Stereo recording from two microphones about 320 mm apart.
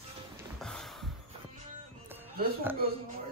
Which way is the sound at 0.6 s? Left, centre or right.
Centre.